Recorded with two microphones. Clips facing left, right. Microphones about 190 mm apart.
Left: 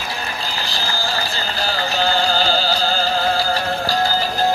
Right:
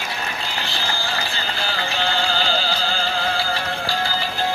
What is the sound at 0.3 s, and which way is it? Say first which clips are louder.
Run: left 2 dB; 35° left (ahead or behind).